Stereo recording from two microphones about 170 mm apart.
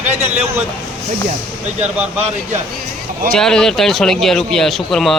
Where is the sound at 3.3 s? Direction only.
5° left (ahead or behind).